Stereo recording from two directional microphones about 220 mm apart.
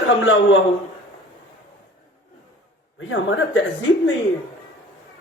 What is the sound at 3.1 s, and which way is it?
A man's voice, 60° left (ahead or behind).